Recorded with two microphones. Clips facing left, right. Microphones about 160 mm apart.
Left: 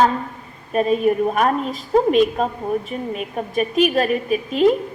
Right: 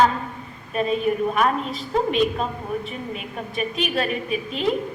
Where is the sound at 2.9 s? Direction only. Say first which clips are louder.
Left 6 dB; 45° left (ahead or behind).